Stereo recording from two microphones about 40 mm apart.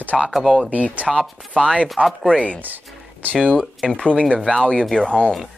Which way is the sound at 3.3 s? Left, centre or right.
Centre.